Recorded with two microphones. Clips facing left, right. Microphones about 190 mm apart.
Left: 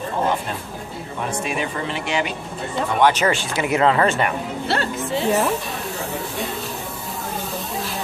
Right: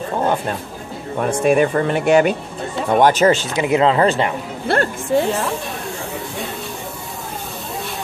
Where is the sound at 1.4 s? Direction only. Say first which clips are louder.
Right 14 dB; 50° right (ahead or behind).